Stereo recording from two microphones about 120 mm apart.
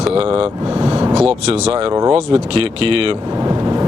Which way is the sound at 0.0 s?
50° right (ahead or behind).